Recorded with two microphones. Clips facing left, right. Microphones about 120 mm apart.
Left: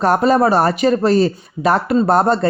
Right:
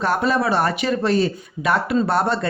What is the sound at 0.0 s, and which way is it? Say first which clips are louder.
Speech: left 6 dB; 40° left (ahead or behind).